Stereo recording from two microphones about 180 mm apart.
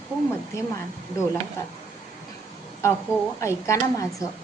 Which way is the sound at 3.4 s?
15° left (ahead or behind).